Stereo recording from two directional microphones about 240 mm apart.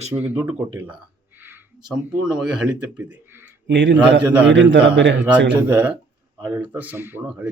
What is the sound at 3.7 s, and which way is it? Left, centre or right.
Speech, right.